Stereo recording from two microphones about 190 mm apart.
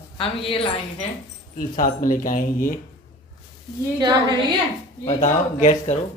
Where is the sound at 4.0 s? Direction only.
20° right (ahead or behind).